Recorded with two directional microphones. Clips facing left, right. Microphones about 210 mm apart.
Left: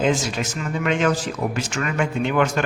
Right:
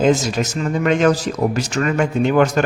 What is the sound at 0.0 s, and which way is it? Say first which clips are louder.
Speech: right 5 dB; 40° right (ahead or behind).